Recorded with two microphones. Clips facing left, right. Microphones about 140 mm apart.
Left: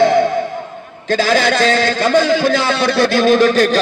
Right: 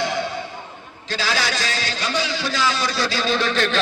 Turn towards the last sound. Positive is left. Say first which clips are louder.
# left 10 dB
turn(degrees=40)  # may be behind; listen again after turning